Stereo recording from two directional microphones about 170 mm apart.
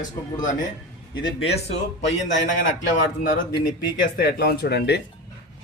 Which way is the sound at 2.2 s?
45° left (ahead or behind).